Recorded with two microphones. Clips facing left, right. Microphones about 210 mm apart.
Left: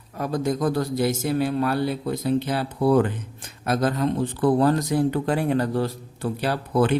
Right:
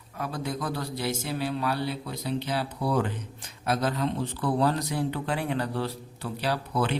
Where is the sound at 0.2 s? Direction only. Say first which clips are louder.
Left 8 dB; 45° left (ahead or behind).